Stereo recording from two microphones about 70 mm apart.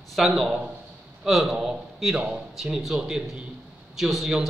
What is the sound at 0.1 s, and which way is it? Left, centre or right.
A man's voice, centre.